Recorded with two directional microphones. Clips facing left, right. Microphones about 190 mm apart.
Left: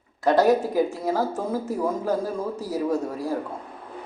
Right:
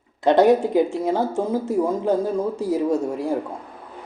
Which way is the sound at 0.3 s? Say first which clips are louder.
Right 3 dB; 25° right (ahead or behind).